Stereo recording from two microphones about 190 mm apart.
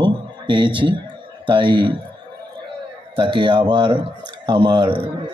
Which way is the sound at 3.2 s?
25° right (ahead or behind).